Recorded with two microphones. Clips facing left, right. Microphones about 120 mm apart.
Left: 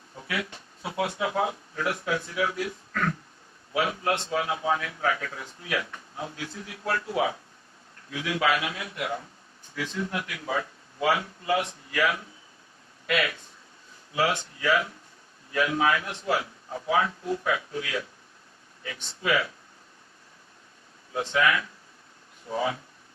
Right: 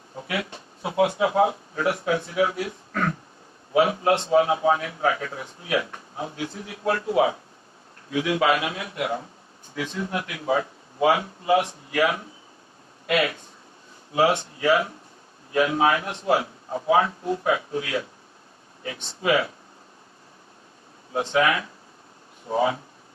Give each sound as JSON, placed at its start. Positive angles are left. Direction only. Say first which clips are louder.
{"t": 0.8, "sound": "a man's voice", "louder": "right 7 dB", "side_deg": -20}
{"t": 21.1, "sound": "a man's voice", "louder": "right 3 dB", "side_deg": -30}